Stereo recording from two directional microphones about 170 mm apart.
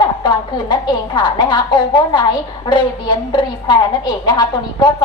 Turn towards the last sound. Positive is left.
turn(degrees=25)  # may be behind; listen again after turning